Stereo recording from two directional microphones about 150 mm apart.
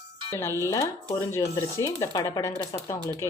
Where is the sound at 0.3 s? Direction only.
20° left (ahead or behind).